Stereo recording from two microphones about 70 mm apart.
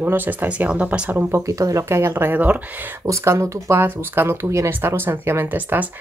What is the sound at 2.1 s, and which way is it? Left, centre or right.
Speech, right.